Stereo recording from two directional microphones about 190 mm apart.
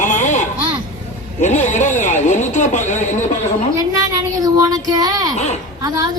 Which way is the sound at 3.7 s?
20° right (ahead or behind).